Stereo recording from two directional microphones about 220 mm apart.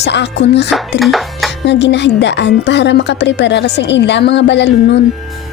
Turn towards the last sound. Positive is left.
turn(degrees=50)  # may be behind; listen again after turning